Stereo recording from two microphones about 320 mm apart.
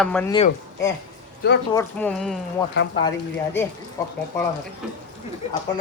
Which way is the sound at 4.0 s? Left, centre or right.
Centre.